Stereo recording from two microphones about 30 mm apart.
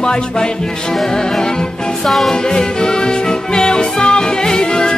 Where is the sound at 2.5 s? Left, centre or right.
Left.